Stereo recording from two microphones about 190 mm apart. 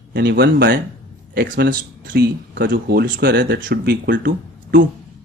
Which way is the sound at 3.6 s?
55° right (ahead or behind).